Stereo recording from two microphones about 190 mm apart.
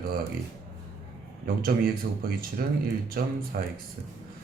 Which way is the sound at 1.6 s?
50° right (ahead or behind).